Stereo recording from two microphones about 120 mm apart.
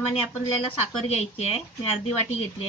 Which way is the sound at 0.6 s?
55° left (ahead or behind).